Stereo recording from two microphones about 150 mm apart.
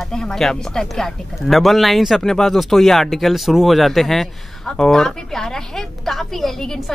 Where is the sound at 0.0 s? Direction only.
5° left (ahead or behind).